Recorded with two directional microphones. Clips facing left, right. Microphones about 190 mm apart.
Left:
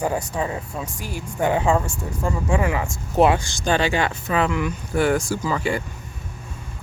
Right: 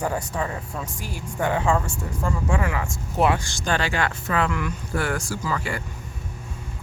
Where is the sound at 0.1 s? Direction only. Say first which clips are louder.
Left 3 dB; 20° left (ahead or behind).